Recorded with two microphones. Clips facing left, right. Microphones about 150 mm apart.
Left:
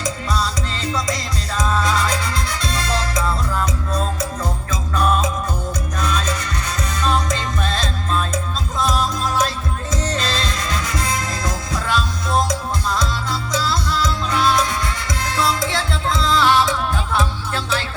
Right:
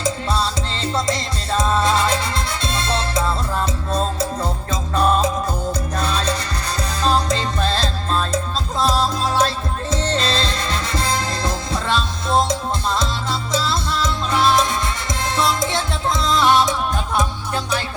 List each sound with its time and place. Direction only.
0.0 s music: 30° right (ahead or behind)